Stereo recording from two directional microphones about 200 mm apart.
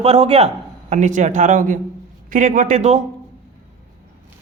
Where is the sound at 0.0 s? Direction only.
30° right (ahead or behind).